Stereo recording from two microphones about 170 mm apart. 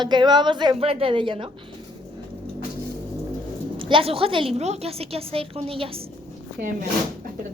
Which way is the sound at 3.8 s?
30° right (ahead or behind).